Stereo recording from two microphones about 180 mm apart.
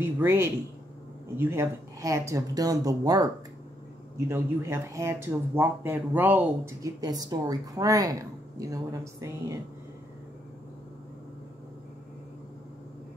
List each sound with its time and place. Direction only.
0.0 s speech: 15° right (ahead or behind)